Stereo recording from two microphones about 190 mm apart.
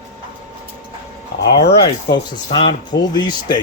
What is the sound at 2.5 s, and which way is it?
Speech, 25° left (ahead or behind).